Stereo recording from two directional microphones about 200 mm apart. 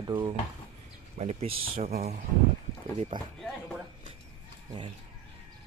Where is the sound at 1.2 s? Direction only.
30° right (ahead or behind).